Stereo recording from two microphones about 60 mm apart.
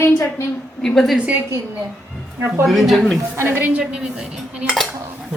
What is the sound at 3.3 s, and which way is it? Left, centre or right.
Speech, right.